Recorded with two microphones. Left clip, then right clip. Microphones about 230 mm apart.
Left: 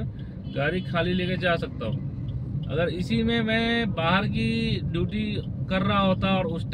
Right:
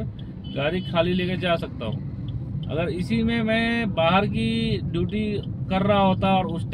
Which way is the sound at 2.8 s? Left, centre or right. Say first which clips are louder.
Even; centre.